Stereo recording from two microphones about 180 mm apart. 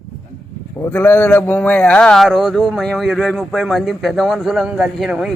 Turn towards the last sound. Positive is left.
turn(degrees=-5)  # may be behind; listen again after turning